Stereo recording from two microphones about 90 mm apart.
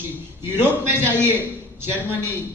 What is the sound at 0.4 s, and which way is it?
A man's voice, 25° right (ahead or behind).